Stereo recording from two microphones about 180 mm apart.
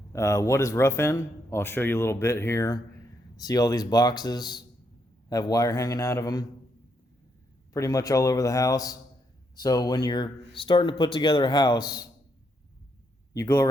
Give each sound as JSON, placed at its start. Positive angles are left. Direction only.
{"t": 0.1, "sound": "speech", "side_deg": 15}
{"t": 7.7, "sound": "speech", "side_deg": 20}
{"t": 13.3, "sound": "speech", "side_deg": 15}